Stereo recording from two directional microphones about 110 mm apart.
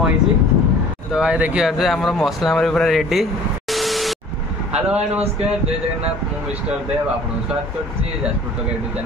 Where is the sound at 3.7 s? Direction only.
Centre (ahead or behind).